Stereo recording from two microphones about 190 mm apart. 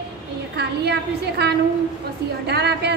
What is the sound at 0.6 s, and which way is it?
A woman's voice, 60° right (ahead or behind).